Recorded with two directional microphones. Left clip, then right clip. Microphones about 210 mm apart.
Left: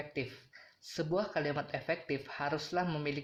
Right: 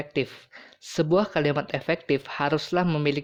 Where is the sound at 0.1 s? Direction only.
40° right (ahead or behind).